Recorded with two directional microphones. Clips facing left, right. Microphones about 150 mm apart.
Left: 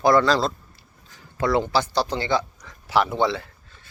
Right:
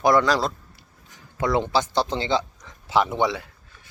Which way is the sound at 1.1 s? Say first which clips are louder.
Left 1 dB; 20° right (ahead or behind).